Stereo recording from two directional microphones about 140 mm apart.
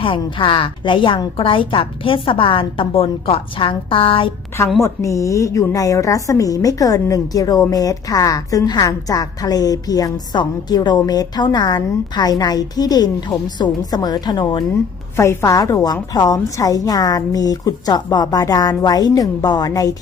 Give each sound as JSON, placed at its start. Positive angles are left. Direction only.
{"t": 0.0, "sound": "a woman's voice", "side_deg": 40}
{"t": 4.8, "sound": "a woman's voice", "side_deg": 20}
{"t": 15.1, "sound": "a woman's voice", "side_deg": 20}